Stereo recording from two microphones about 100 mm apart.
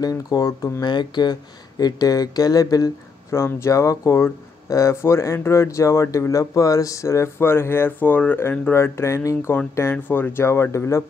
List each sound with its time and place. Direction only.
0.0 s speech: 40° left (ahead or behind)
0.8 s speech: 50° left (ahead or behind); by 11.1 s 30° left (ahead or behind)